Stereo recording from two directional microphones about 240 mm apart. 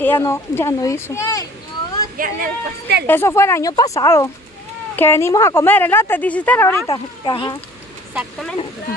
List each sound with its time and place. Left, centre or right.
0.0 s a woman's voice: centre
2.1 s speech: right
3.1 s a woman's voice: centre
8.1 s speech: centre